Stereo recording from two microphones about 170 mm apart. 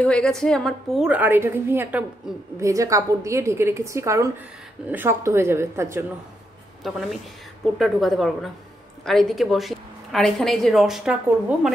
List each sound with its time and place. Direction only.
0.0 s a woman's voice: 5° left (ahead or behind); by 6.0 s 15° right (ahead or behind)
6.8 s speech: centre (ahead or behind)